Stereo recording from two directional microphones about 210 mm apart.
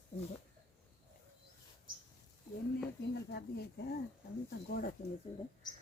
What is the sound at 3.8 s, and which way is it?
Speech, 45° left (ahead or behind).